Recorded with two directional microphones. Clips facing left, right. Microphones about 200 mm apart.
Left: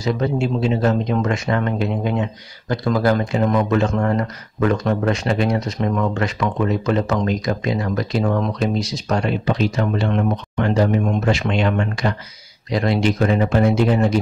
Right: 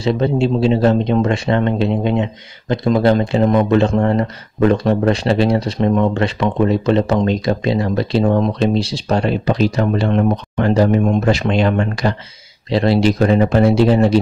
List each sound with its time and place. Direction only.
0.0 s speech: 25° right (ahead or behind)